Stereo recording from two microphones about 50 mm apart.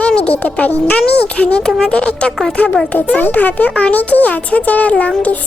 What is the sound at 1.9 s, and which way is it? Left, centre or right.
A child's voice, left.